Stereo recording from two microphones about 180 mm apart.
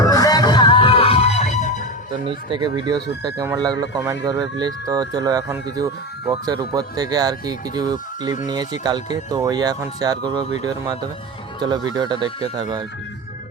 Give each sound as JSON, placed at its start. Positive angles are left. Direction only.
{"t": 0.0, "sound": "music", "side_deg": 20}
{"t": 2.2, "sound": "speech", "side_deg": -25}
{"t": 11.9, "sound": "speech", "side_deg": -25}